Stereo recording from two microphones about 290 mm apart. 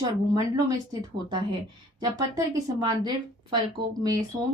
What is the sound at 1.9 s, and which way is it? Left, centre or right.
Speech, centre.